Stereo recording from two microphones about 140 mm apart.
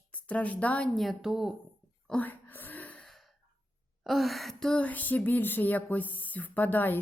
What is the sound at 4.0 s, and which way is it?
A woman's voice, centre (ahead or behind).